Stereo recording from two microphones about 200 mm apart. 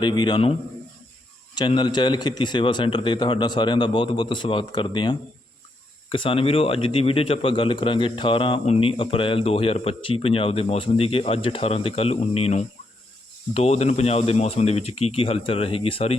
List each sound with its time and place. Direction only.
0.0 s a man's voice: 20° left (ahead or behind)
1.5 s a man's voice: 20° left (ahead or behind)